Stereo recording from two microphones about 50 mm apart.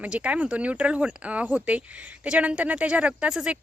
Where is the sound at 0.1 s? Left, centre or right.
Right.